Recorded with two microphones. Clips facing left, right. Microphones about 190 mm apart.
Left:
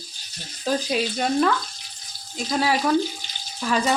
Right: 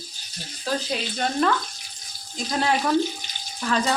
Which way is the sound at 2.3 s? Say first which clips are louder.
Left 1 dB; 5° left (ahead or behind).